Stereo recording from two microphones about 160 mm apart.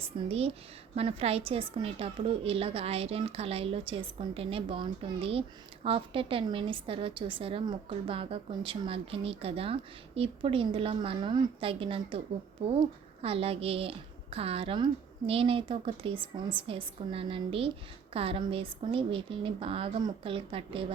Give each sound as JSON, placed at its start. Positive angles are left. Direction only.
{"t": 0.0, "sound": "a woman's voice", "side_deg": -40}